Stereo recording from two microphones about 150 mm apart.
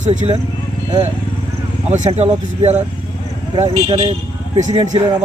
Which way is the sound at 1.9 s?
50° right (ahead or behind).